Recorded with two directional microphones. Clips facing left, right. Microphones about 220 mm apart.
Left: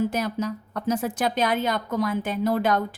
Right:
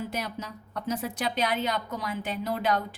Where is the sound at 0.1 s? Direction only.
45° left (ahead or behind).